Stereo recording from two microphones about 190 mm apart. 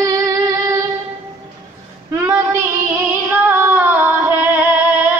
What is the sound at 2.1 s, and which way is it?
Child singing, 10° right (ahead or behind).